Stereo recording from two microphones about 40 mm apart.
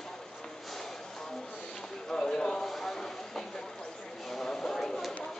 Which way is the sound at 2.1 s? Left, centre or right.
Centre.